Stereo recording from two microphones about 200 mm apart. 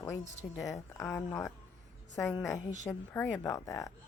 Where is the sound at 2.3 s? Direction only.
15° left (ahead or behind).